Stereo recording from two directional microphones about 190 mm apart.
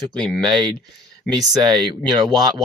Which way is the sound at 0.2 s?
Centre (ahead or behind).